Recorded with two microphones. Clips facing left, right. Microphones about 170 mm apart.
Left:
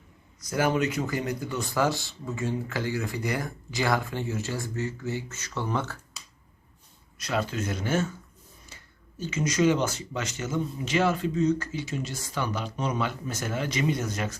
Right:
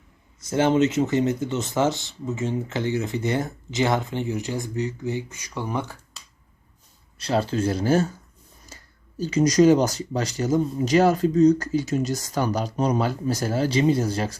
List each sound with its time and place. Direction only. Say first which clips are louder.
0.3 s speech: right 6 dB; 25° right (ahead or behind)
7.2 s speech: right 6 dB; 30° right (ahead or behind)